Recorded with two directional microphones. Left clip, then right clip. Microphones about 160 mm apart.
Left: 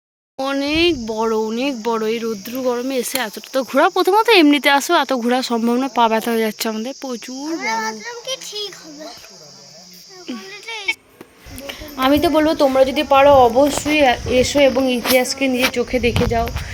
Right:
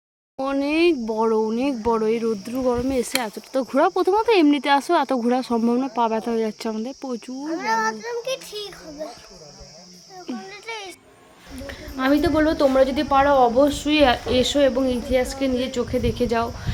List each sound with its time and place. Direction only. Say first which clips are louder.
0.3 s speech: left 3 dB; centre (ahead or behind)
7.6 s a child's voice: right 1 dB; 80° right
10.5 s a sound: left 6 dB; 65° right (ahead or behind)
11.6 s cricket: left 5 dB; 20° left (ahead or behind)
12.5 s speech: left 3 dB; centre (ahead or behind)
15.1 s music: left 6 dB; 30° left (ahead or behind)
15.7 s speech: left 5 dB; 20° left (ahead or behind)